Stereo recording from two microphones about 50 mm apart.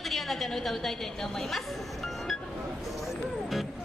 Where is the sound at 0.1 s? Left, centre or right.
Centre.